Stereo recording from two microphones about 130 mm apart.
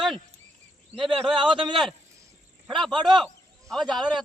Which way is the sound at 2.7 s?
Centre (ahead or behind).